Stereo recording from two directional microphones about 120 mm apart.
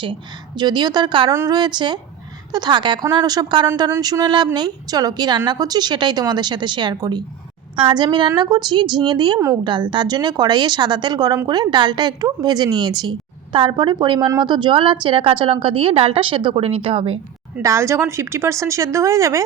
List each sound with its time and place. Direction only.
0.0 s a woman's voice: 40° right (ahead or behind)
17.6 s a woman's voice: 25° right (ahead or behind)